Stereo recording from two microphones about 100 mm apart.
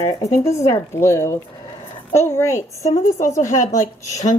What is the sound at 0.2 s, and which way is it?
A woman's voice, 30° left (ahead or behind).